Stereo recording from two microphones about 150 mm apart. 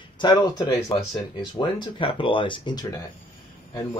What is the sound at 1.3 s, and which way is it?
Speech, 35° left (ahead or behind).